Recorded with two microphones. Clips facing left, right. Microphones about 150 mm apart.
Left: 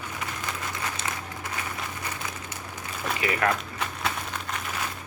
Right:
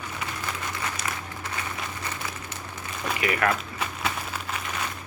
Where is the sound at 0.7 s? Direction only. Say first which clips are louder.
Even; 25° left (ahead or behind).